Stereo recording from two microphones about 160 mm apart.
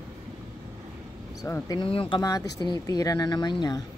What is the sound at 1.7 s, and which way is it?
Speech, 30° left (ahead or behind).